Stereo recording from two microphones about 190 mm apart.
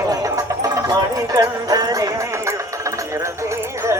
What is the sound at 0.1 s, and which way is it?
Music, 20° right (ahead or behind).